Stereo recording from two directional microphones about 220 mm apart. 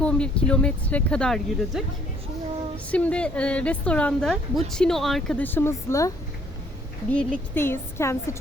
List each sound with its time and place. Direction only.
0.0 s a woman's voice: 5° left (ahead or behind)